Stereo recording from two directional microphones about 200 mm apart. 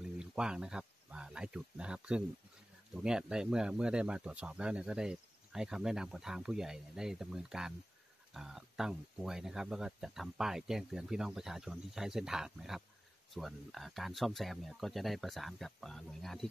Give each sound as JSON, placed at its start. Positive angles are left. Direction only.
{"t": 0.2, "sound": "speech", "side_deg": -5}